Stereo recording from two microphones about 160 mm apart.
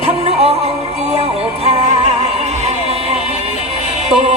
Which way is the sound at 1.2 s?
40° right (ahead or behind).